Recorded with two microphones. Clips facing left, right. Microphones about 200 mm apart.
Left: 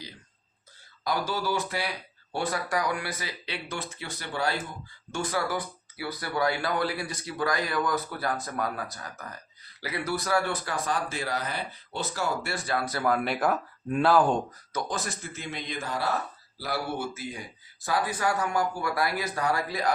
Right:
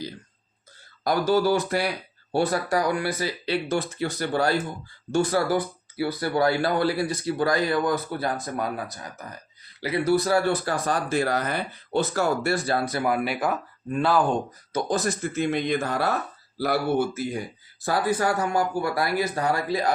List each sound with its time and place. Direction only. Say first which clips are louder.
1.0 s speech: right 8 dB; 50° right (ahead or behind)
2.5 s speech: right 5 dB; 35° right (ahead or behind)
12.9 s speech: right 2 dB; 15° right (ahead or behind)
14.7 s speech: right 9 dB; 35° right (ahead or behind); by 16.0 s 55° right (ahead or behind)
17.8 s speech: right 4 dB; 35° right (ahead or behind)